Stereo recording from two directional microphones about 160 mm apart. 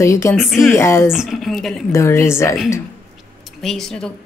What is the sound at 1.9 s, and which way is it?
Speech, 15° left (ahead or behind).